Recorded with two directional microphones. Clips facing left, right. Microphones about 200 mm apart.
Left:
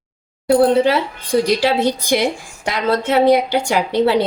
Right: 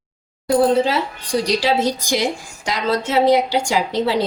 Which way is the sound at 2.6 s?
55° left (ahead or behind).